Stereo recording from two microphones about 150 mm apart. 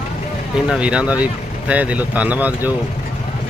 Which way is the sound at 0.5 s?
5° right (ahead or behind).